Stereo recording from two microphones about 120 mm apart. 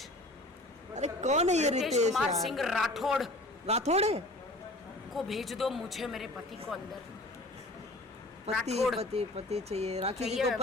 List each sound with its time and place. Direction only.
0.9 s speech: 75° right (ahead or behind)
2.1 s a woman's voice: centre (ahead or behind)
3.7 s speech: 60° right (ahead or behind)
5.1 s a woman's voice: centre (ahead or behind)
8.5 s speech: 60° right (ahead or behind)
10.2 s a woman's voice: centre (ahead or behind)